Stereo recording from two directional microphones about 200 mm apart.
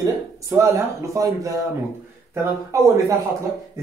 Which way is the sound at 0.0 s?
15° right (ahead or behind).